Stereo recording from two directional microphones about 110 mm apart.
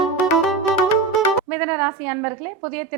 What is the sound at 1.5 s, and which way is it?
A woman's voice, 20° right (ahead or behind).